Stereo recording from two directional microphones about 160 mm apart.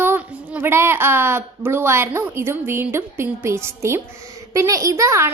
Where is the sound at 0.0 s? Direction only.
10° right (ahead or behind).